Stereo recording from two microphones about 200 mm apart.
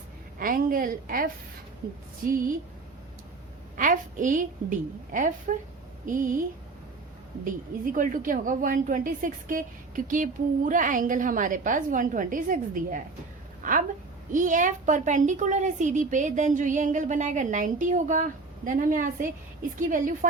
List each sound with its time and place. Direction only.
0.3 s a woman's voice: 45° right (ahead or behind)
3.8 s a woman's voice: 40° right (ahead or behind)
5.5 s a woman's voice: 40° right (ahead or behind)
7.9 s a woman's voice: 40° right (ahead or behind)